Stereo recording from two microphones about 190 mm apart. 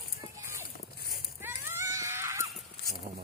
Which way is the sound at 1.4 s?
10° right (ahead or behind).